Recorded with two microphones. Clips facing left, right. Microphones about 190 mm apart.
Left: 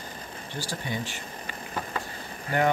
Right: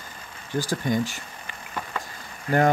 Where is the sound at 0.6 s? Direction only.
40° right (ahead or behind).